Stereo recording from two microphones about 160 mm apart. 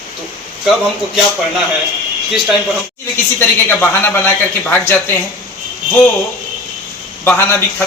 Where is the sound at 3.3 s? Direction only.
15° left (ahead or behind).